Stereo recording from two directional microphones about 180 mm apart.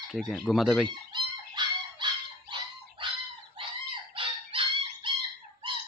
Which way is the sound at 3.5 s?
30° right (ahead or behind).